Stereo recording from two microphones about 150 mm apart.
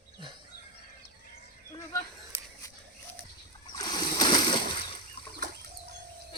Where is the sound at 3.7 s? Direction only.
25° left (ahead or behind).